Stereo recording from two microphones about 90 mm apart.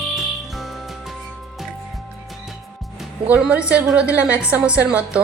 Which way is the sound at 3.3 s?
10° right (ahead or behind).